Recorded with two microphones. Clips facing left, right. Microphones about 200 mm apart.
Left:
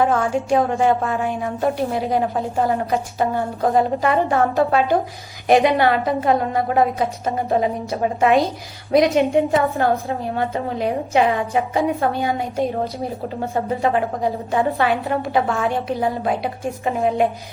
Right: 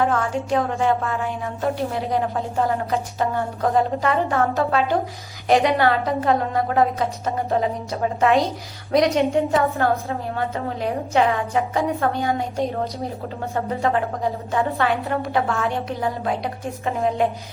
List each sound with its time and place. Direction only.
0.1 s a woman's voice: 15° left (ahead or behind)
9.3 s a woman's voice: 15° left (ahead or behind)
14.8 s a woman's voice: centre (ahead or behind)
16.2 s a woman's voice: 10° left (ahead or behind)